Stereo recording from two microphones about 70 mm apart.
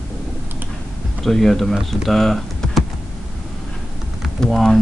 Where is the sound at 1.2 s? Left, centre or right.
Centre.